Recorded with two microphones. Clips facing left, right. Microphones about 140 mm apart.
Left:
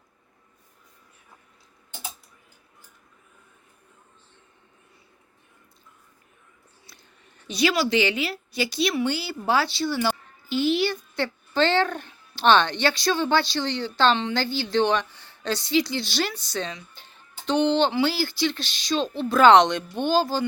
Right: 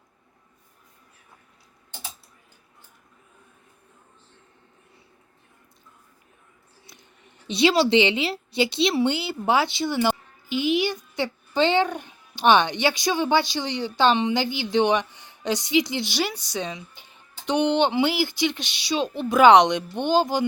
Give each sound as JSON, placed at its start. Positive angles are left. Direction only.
{"t": 7.4, "sound": "a woman's voice", "side_deg": -25}